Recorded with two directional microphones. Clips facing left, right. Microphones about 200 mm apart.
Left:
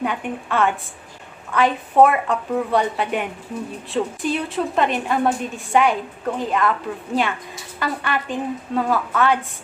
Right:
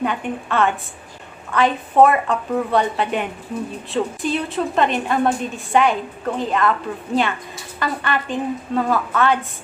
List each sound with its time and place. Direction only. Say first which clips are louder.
0.0 s a woman's voice: right 2 dB; 10° left (ahead or behind)
7.8 s a woman's voice: right 1 dB; 10° left (ahead or behind)